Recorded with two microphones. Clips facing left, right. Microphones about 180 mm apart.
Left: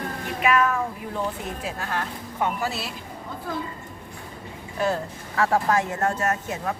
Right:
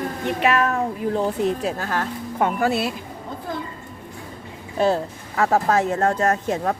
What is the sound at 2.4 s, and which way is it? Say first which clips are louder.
Speech: right 6 dB; 55° right (ahead or behind).